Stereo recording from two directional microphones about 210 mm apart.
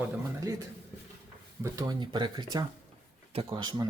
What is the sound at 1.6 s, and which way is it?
Speech, 15° right (ahead or behind).